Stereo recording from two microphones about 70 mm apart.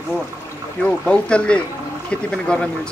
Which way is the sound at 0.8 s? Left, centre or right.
Centre.